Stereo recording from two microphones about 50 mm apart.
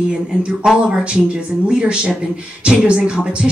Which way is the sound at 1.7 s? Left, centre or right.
Centre.